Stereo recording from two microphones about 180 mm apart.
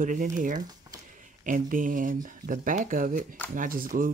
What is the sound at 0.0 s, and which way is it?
Speech, 45° right (ahead or behind).